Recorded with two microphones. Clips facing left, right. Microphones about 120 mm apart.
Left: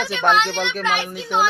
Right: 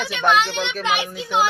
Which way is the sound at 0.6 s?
10° right (ahead or behind).